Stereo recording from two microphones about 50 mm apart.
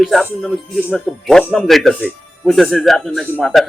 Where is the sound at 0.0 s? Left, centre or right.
Centre.